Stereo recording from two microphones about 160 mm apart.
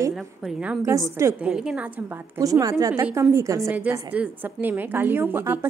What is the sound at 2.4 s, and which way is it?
A woman's voice, 20° right (ahead or behind).